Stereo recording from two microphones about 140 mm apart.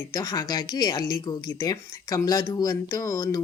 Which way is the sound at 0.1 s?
25° left (ahead or behind).